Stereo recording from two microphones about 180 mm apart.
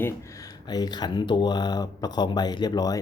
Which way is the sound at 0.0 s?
20° left (ahead or behind).